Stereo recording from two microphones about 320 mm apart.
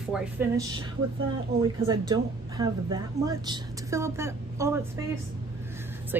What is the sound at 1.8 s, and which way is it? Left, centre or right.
A woman's voice, centre.